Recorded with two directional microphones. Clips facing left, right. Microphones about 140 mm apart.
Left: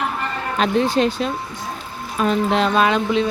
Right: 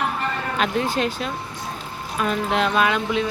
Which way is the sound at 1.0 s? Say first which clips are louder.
Left 6 dB; 25° left (ahead or behind).